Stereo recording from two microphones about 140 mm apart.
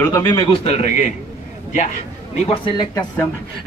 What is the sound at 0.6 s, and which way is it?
Speech, 50° left (ahead or behind).